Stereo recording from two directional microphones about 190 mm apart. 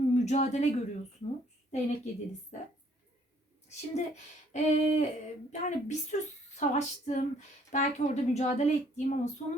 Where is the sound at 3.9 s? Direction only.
35° left (ahead or behind).